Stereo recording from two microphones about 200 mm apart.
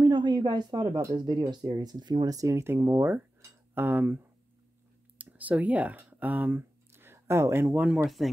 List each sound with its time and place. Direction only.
0.0 s speech: 20° right (ahead or behind); by 8.3 s centre (ahead or behind)